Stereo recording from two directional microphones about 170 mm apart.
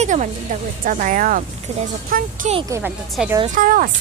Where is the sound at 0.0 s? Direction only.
45° right (ahead or behind).